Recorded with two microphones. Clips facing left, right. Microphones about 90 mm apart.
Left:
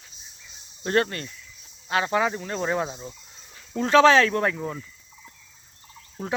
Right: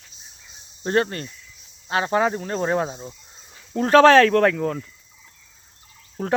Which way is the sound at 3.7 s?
45° right (ahead or behind).